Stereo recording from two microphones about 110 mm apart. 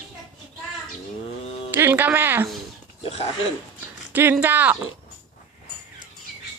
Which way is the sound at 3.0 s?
70° left (ahead or behind).